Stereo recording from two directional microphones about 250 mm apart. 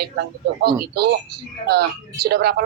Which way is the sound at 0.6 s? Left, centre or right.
Right.